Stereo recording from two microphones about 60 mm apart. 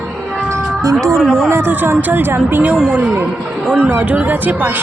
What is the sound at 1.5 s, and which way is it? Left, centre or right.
A woman's voice, right.